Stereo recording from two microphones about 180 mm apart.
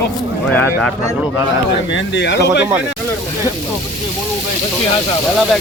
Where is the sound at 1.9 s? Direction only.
85° left.